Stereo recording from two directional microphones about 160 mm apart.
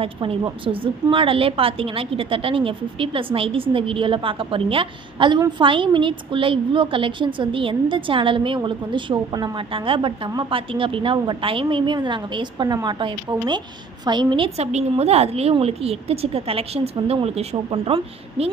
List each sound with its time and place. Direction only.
0.0 s a woman's voice: 35° right (ahead or behind)